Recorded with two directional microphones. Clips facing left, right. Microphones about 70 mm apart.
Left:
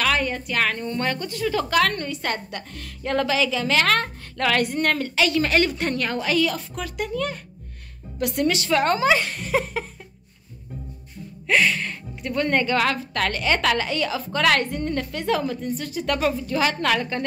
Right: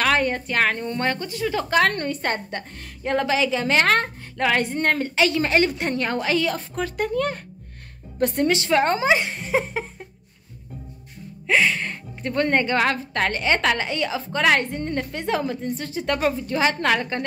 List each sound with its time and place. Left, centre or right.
0.0 s a woman's voice: right
11.4 s music: right
12.4 s a woman's voice: right